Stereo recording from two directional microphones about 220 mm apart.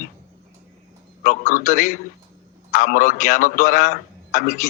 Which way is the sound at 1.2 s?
35° left (ahead or behind).